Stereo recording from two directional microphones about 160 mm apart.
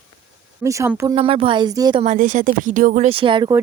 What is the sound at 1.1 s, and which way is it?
Speech, 35° right (ahead or behind).